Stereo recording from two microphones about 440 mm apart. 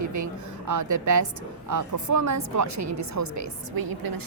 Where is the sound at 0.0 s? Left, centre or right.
Right.